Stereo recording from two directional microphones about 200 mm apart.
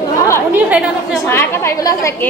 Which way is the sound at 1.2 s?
10° left (ahead or behind).